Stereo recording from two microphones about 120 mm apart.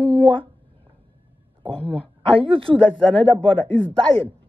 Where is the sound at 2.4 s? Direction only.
50° right (ahead or behind).